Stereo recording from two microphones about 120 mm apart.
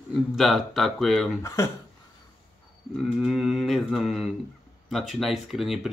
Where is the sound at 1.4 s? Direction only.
25° left (ahead or behind).